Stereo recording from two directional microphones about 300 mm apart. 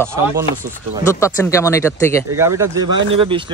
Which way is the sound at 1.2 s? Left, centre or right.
Centre.